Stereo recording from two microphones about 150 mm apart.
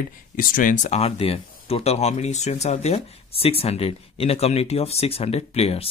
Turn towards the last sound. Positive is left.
turn(degrees=45)  # may be behind; listen again after turning